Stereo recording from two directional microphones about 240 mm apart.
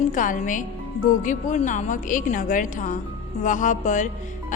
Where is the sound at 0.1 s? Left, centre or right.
Left.